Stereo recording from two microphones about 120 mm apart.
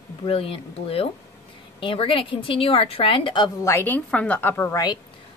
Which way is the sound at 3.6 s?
20° left (ahead or behind).